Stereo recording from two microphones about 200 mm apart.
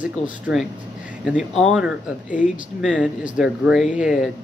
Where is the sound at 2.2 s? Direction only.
40° left (ahead or behind).